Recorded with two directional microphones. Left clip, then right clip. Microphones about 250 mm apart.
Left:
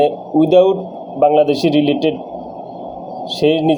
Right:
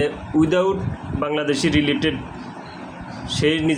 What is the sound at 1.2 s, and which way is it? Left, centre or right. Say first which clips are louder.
Speech: left 9 dB; centre.